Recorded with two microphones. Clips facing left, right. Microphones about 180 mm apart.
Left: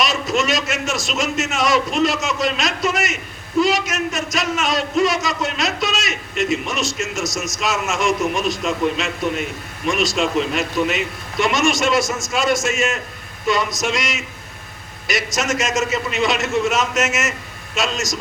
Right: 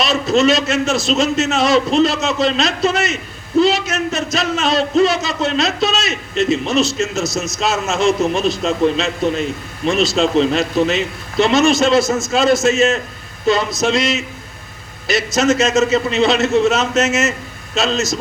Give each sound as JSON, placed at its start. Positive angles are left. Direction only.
{"t": 0.0, "sound": "a man's voice", "side_deg": -25}